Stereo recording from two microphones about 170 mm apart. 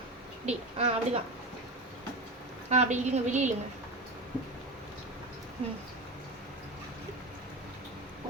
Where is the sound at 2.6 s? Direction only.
40° right (ahead or behind).